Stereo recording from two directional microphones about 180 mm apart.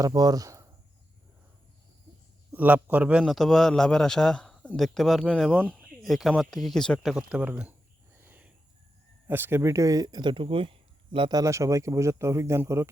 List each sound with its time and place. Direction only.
0.0 s speech: 20° right (ahead or behind)
2.5 s a man's voice: 10° right (ahead or behind)
8.2 s cricket: 10° right (ahead or behind)
9.2 s speech: 10° right (ahead or behind)